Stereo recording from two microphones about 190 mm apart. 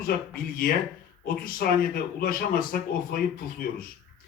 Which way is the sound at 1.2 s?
50° left (ahead or behind).